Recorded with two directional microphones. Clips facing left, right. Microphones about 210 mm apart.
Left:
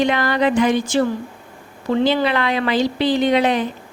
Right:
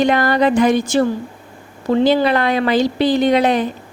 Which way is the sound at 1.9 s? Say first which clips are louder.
Right 3 dB; 40° right (ahead or behind).